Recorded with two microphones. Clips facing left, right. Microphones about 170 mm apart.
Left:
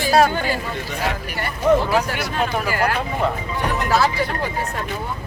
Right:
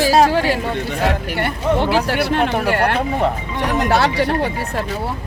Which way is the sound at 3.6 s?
80° right.